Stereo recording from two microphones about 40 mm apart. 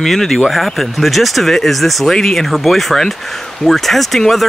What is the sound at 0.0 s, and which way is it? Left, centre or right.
Speech, centre.